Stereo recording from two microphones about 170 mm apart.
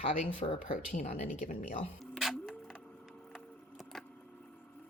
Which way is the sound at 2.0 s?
Centre (ahead or behind).